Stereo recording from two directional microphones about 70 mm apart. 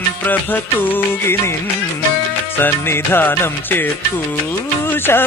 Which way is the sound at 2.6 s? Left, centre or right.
Left.